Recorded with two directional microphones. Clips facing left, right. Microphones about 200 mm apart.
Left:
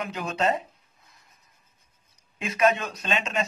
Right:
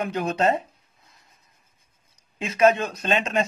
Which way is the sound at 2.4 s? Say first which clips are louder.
Right 4 dB; 30° right (ahead or behind).